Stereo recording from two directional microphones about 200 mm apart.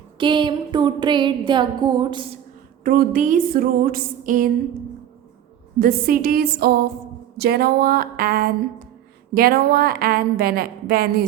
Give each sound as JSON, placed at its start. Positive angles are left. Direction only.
{"t": 0.2, "sound": "a sound", "side_deg": -25}
{"t": 2.8, "sound": "a woman's voice", "side_deg": -45}
{"t": 5.8, "sound": "a woman's voice", "side_deg": -45}